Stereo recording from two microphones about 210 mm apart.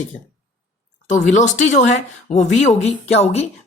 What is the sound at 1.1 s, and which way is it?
Speech, 35° left (ahead or behind).